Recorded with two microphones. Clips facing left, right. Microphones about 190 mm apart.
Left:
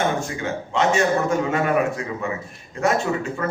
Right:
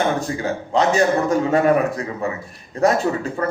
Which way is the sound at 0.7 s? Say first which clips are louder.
Right 2 dB; 35° right (ahead or behind).